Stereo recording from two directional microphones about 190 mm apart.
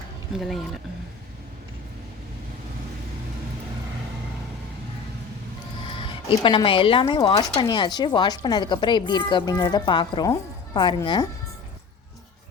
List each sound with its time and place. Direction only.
0.3 s speech: centre (ahead or behind)
6.0 s speech: 25° left (ahead or behind)